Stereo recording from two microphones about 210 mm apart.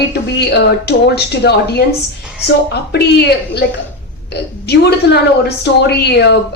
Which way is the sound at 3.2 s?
50° left (ahead or behind).